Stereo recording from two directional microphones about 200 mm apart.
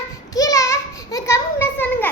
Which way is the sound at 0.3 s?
15° left (ahead or behind).